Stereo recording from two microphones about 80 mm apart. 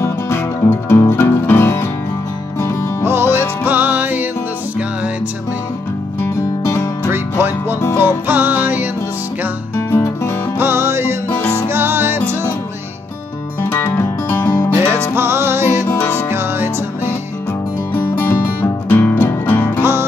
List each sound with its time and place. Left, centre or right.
0.0 s music: left
3.0 s music: right
6.6 s music: left
7.1 s music: right
9.8 s music: left
10.6 s music: right
13.6 s music: left
14.7 s music: right
15.9 s music: left
16.3 s music: right
17.9 s music: left
19.8 s music: right